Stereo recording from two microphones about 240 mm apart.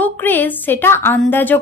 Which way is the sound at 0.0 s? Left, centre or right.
Centre.